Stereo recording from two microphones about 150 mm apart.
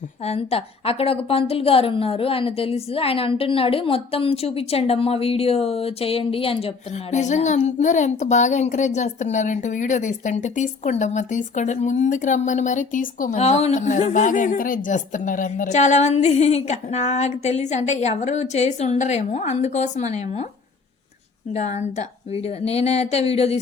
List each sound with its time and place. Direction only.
0.3 s a woman's voice: 40° left (ahead or behind); by 13.4 s 65° left (ahead or behind)
13.4 s a woman's voice: 45° left (ahead or behind)
21.5 s a woman's voice: 50° left (ahead or behind)